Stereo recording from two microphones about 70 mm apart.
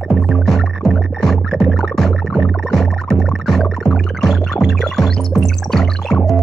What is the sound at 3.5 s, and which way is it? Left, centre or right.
Music, centre.